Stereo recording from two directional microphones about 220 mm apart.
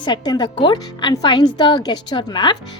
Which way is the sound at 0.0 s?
20° left (ahead or behind).